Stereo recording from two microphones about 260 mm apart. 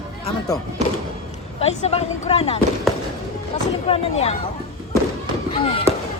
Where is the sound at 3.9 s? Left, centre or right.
Left.